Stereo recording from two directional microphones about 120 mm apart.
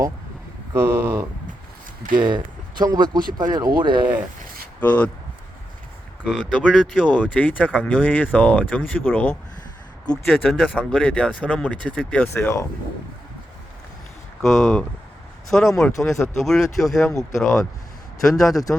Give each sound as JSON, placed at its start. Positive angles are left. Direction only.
{"t": 0.7, "sound": "speech", "side_deg": -20}
{"t": 2.1, "sound": "speech", "side_deg": -35}
{"t": 4.8, "sound": "speech", "side_deg": 10}
{"t": 6.2, "sound": "speech", "side_deg": 5}
{"t": 10.1, "sound": "speech", "side_deg": 5}
{"t": 14.4, "sound": "speech", "side_deg": 0}